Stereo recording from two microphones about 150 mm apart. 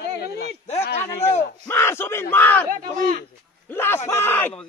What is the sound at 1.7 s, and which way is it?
Speech, 15° left (ahead or behind).